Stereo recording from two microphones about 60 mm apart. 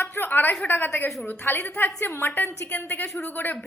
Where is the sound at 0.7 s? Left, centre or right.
Left.